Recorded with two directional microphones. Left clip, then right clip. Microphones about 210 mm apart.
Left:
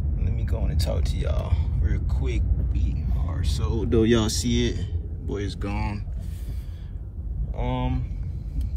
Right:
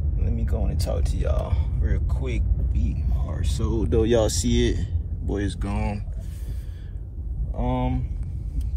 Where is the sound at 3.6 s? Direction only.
35° left (ahead or behind); by 6.0 s 10° left (ahead or behind).